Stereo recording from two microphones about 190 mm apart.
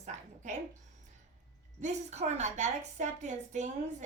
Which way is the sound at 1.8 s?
35° right (ahead or behind).